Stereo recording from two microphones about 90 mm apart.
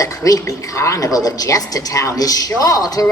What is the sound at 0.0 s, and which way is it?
A woman's voice, 40° left (ahead or behind).